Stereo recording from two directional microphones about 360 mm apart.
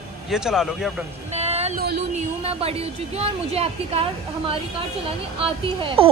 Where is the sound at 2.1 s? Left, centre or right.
Centre.